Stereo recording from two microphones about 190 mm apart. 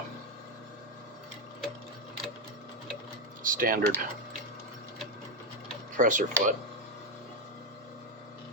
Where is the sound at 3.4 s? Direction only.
45° right (ahead or behind).